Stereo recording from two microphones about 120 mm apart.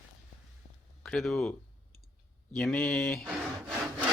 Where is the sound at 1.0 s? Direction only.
5° left (ahead or behind).